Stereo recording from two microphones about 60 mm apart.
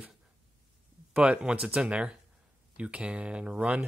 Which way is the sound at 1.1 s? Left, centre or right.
Centre.